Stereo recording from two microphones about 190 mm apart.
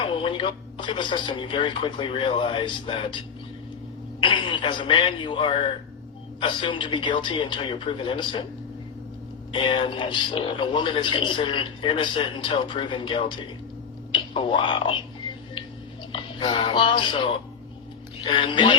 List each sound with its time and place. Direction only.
0.0 s a man's voice: 25° left (ahead or behind)
4.2 s a man's voice: 25° left (ahead or behind)
9.5 s a man's voice: 25° left (ahead or behind)
16.1 s a man's voice: 25° left (ahead or behind)